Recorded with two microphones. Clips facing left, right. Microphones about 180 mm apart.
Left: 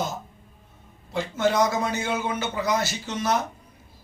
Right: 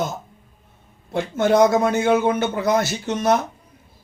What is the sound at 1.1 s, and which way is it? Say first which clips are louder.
A man's voice: right 5 dB; 55° right (ahead or behind).